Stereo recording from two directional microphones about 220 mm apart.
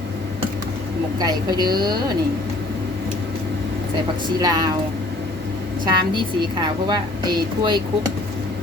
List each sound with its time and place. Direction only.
1.2 s a woman's voice: 15° right (ahead or behind)
4.4 s a woman's voice: 20° right (ahead or behind)
5.8 s a woman's voice: 20° right (ahead or behind)